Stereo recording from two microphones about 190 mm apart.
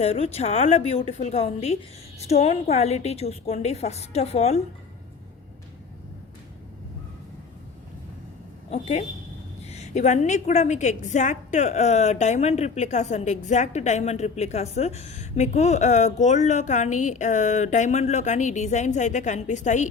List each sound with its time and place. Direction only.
0.0 s a woman's voice: 35° left (ahead or behind)
8.7 s a woman's voice: 35° left (ahead or behind)